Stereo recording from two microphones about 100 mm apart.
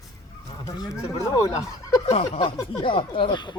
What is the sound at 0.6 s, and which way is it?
Speech, 35° left (ahead or behind).